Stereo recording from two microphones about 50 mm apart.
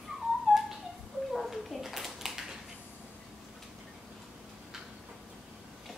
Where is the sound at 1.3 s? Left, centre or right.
Centre.